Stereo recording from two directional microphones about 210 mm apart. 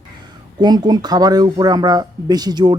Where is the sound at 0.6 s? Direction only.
20° right (ahead or behind).